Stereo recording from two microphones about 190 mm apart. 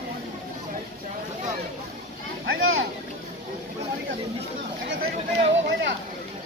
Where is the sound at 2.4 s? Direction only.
90° right.